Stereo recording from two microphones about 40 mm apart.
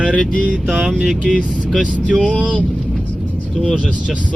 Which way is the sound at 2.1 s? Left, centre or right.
Right.